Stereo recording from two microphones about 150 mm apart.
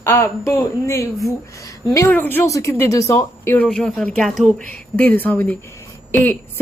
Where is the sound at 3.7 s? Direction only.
5° left (ahead or behind).